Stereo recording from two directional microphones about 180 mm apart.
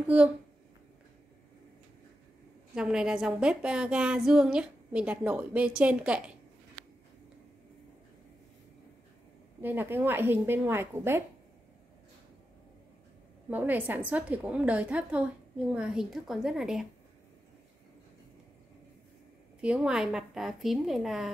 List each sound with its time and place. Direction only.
0.0 s a woman's voice: 5° right (ahead or behind)
2.7 s a woman's voice: 5° right (ahead or behind)
9.6 s a woman's voice: 10° right (ahead or behind)
13.5 s a woman's voice: 10° right (ahead or behind)
19.6 s a woman's voice: 5° right (ahead or behind)